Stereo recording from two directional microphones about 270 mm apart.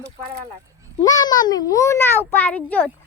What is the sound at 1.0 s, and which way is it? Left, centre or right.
A child's voice, centre.